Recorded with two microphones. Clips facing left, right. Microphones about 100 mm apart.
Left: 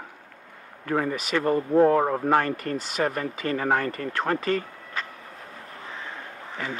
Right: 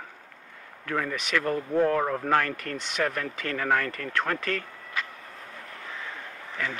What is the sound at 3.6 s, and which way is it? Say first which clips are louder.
Speech: left 1 dB; 15° left (ahead or behind).